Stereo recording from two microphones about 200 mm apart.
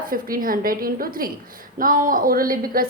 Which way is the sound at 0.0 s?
45° right (ahead or behind).